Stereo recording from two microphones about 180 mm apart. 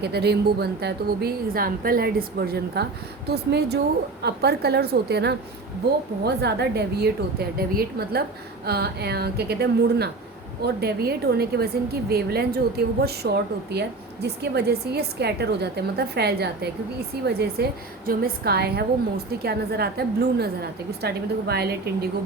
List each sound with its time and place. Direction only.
0.0 s a woman's voice: 65° right (ahead or behind)